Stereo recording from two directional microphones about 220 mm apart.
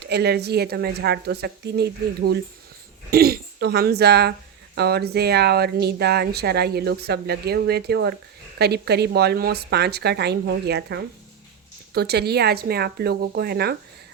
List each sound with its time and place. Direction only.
0.0 s speech: 45° right (ahead or behind)